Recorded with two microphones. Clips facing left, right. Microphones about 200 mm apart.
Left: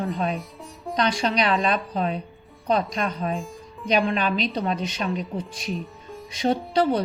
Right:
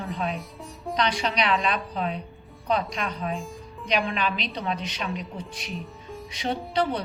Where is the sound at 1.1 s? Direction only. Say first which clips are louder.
Left 4 dB; 40° left (ahead or behind).